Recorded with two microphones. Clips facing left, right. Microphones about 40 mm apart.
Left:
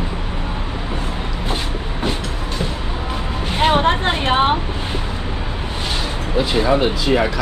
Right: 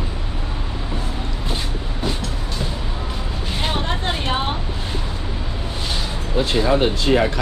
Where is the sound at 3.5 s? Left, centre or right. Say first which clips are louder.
Left 9 dB; left.